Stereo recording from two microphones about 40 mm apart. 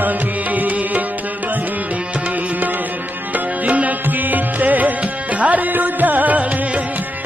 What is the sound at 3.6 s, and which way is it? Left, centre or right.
Music, right.